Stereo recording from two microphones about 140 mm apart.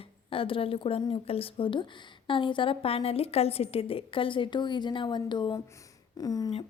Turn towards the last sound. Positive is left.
turn(degrees=25)  # may be behind; listen again after turning